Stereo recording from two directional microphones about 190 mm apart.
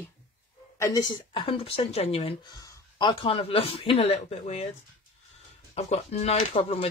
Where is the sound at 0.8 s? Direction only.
20° left (ahead or behind); by 4.7 s 35° left (ahead or behind).